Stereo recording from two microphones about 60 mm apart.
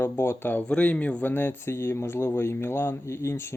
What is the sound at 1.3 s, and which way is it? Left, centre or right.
Speech, left.